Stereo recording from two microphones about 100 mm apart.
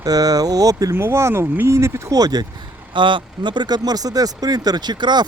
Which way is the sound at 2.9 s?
55° right (ahead or behind).